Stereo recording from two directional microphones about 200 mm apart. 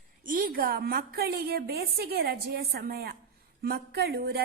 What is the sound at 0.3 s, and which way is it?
A woman's voice, 45° right (ahead or behind).